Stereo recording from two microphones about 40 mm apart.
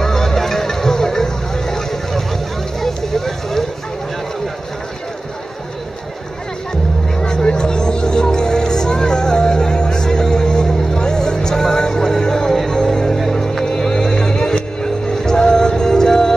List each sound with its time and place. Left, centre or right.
0.0 s music: centre
2.8 s a sound: centre
6.7 s music: centre